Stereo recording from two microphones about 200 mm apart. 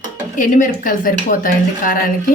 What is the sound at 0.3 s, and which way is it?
Speech, 40° left (ahead or behind).